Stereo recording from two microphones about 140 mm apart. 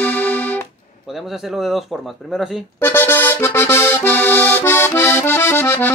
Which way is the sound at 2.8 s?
15° left (ahead or behind).